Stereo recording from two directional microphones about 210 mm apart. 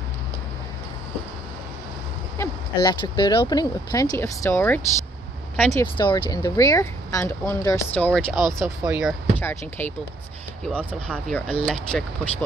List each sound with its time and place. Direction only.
2.3 s speech: 15° left (ahead or behind)
5.9 s speech: 20° left (ahead or behind); by 9.1 s 5° right (ahead or behind)
9.4 s speech: 10° left (ahead or behind)